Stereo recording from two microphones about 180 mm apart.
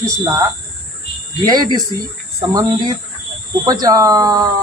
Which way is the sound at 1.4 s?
20° right (ahead or behind).